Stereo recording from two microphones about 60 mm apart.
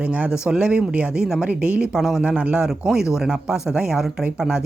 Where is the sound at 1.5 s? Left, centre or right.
Right.